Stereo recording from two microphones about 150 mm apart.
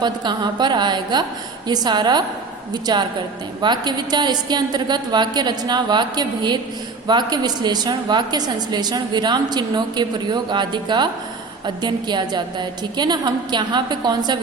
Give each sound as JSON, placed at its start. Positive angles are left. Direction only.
{"t": 0.0, "sound": "a woman's voice", "side_deg": -30}